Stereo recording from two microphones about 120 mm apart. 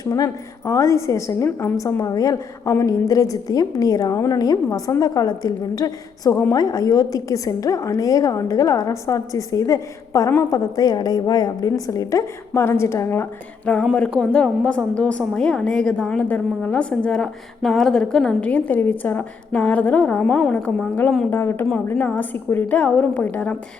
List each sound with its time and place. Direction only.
0.0 s a woman's voice: 30° left (ahead or behind)
13.7 s a woman's voice: 5° left (ahead or behind)